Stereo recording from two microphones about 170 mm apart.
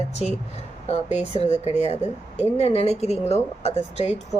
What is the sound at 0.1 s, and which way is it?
Speech, 40° left (ahead or behind).